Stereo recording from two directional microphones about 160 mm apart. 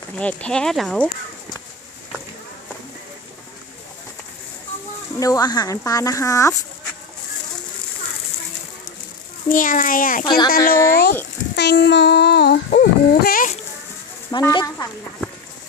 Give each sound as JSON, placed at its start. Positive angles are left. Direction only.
{"t": 0.2, "sound": "speech", "side_deg": 5}
{"t": 5.2, "sound": "speech", "side_deg": 20}
{"t": 9.5, "sound": "a child's voice", "side_deg": 55}
{"t": 10.2, "sound": "speech", "side_deg": 25}
{"t": 11.5, "sound": "a sound", "side_deg": 90}
{"t": 14.3, "sound": "speech", "side_deg": 25}